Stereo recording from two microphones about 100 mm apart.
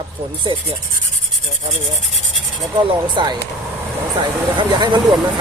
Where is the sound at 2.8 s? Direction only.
55° right (ahead or behind).